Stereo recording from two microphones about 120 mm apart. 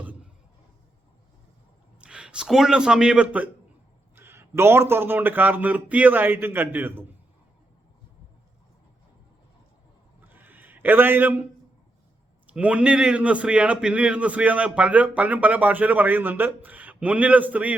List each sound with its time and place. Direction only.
2.0 s a man's voice: 10° right (ahead or behind)
10.2 s a sound: 15° right (ahead or behind)
12.5 s a man's voice: 10° right (ahead or behind)